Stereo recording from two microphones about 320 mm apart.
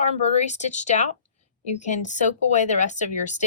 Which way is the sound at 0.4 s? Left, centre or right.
Left.